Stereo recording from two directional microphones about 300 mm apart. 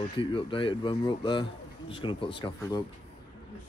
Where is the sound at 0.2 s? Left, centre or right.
Centre.